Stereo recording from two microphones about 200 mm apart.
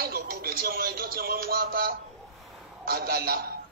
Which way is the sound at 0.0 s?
50° right (ahead or behind).